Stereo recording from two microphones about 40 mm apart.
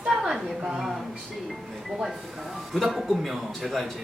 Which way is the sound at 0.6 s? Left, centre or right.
Centre.